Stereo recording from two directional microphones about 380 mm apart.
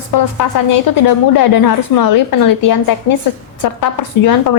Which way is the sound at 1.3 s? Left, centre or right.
Left.